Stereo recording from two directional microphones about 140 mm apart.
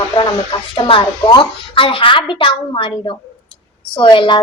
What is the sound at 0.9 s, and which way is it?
A woman's voice, 35° left (ahead or behind).